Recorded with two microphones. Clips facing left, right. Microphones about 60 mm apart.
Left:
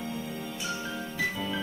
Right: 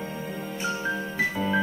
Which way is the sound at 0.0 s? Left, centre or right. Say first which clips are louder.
Right 2 dB; right.